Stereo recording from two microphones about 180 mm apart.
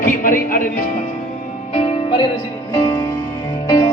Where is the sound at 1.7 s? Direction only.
35° left (ahead or behind).